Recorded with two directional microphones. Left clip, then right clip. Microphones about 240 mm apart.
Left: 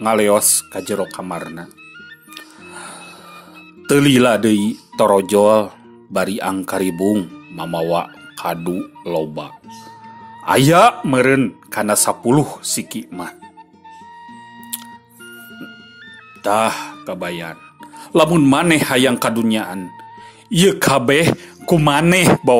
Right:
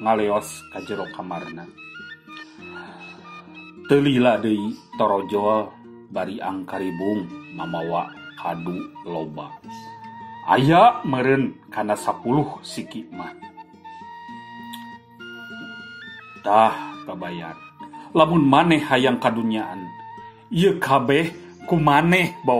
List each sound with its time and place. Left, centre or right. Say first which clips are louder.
0.0 s a man's voice: left 6 dB; left
3.9 s a man's voice: left 4 dB; left
16.4 s a man's voice: even; left